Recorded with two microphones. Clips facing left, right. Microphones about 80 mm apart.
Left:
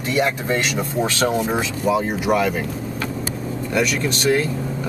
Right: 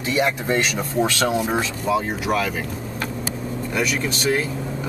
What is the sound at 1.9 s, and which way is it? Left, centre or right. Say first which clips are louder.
Speech: left 4 dB; centre.